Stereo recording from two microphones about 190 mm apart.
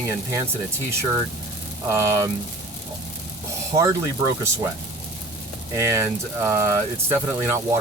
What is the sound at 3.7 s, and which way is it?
Speech, 15° right (ahead or behind).